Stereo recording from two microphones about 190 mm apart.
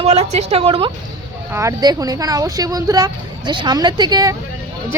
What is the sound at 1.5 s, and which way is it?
A woman's voice, 15° right (ahead or behind).